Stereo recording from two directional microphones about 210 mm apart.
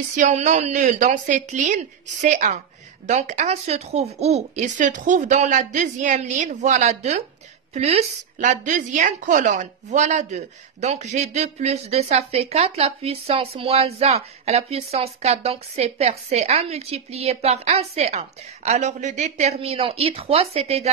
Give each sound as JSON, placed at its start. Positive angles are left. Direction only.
{"t": 0.1, "sound": "a woman's voice", "side_deg": -35}